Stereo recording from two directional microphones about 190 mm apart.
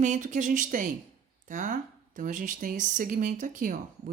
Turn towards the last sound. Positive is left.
turn(degrees=-45)  # may be behind; listen again after turning